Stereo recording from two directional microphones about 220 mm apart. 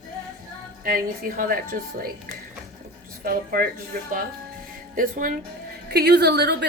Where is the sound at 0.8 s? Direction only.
40° right (ahead or behind).